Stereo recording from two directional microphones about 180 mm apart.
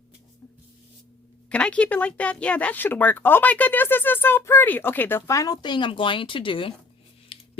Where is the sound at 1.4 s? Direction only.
5° left (ahead or behind).